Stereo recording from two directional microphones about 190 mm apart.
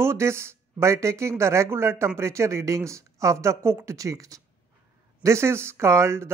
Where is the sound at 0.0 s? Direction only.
15° right (ahead or behind).